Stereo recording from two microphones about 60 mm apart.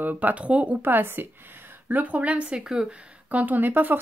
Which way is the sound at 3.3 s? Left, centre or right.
Right.